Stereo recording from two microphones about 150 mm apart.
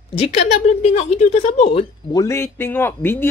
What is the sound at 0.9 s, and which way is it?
Speech, 45° left (ahead or behind).